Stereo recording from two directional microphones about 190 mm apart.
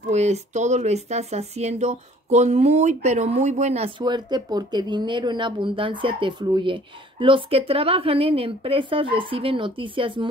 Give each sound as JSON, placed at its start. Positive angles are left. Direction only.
{"t": 0.1, "sound": "speech", "side_deg": -35}
{"t": 4.0, "sound": "speech", "side_deg": -20}